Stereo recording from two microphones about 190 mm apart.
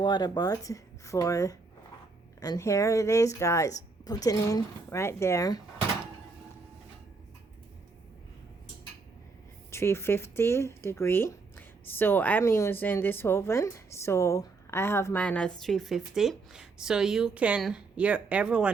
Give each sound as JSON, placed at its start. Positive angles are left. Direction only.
{"t": 0.0, "sound": "speech", "side_deg": 20}
{"t": 9.7, "sound": "speech", "side_deg": 15}